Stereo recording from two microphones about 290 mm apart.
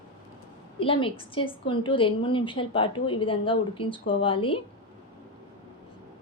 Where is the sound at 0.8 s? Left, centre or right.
Centre.